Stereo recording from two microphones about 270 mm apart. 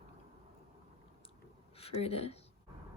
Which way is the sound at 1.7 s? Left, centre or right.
Left.